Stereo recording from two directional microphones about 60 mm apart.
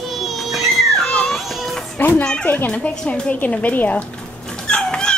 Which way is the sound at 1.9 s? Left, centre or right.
Left.